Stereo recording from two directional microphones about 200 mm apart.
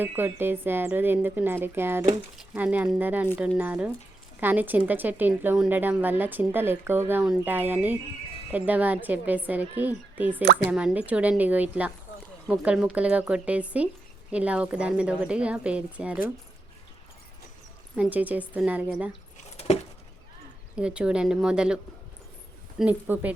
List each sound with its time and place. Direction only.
0.0 s a woman's voice: 10° right (ahead or behind)
17.9 s a woman's voice: 5° right (ahead or behind)
19.5 s keys jangling: 30° left (ahead or behind)
20.7 s speech: 5° right (ahead or behind)
22.8 s a woman's voice: 10° right (ahead or behind)